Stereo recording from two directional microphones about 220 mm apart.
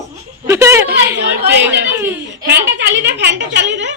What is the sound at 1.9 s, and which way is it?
Speech, 10° right (ahead or behind).